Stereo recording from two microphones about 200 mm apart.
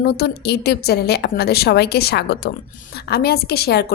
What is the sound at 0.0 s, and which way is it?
A woman's voice, 55° left (ahead or behind).